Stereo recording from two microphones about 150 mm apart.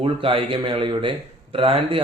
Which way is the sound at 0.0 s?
40° right (ahead or behind).